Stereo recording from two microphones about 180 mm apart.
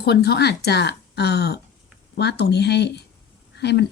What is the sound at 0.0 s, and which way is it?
Speech, 65° left (ahead or behind).